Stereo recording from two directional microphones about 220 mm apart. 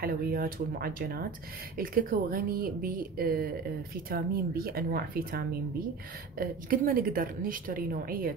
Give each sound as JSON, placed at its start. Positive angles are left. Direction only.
{"t": 0.0, "sound": "a woman's voice", "side_deg": -40}